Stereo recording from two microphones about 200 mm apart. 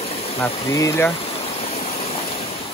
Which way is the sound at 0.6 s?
15° left (ahead or behind).